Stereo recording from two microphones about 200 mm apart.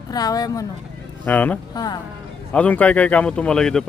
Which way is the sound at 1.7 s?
20° left (ahead or behind).